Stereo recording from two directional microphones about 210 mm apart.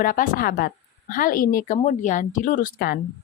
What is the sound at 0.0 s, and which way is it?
A woman's voice, 45° left (ahead or behind).